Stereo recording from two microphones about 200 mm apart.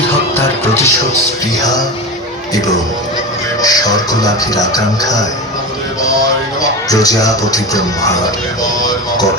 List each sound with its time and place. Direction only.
0.3 s music: 10° left (ahead or behind)
3.6 s speech: 20° left (ahead or behind)
6.6 s speech: 15° left (ahead or behind)